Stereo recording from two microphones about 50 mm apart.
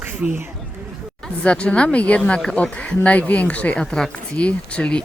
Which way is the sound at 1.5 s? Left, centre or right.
Left.